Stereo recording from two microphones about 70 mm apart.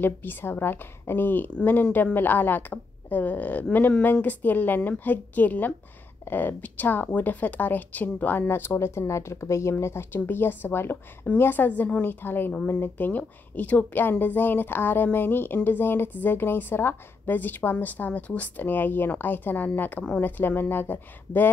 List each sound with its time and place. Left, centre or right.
0.0 s a woman's voice: left